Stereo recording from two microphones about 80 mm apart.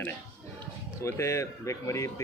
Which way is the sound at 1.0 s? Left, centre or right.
Left.